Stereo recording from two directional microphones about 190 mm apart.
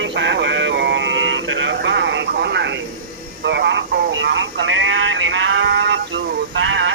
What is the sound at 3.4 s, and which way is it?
Radio, 65° right (ahead or behind).